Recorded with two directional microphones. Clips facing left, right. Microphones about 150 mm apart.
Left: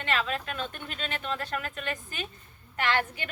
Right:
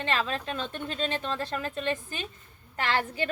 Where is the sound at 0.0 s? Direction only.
35° right (ahead or behind).